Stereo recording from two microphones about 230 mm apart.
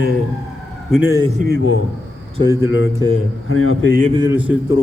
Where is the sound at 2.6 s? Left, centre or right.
Left.